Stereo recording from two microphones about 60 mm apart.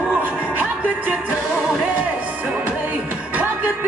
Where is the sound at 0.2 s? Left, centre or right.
Right.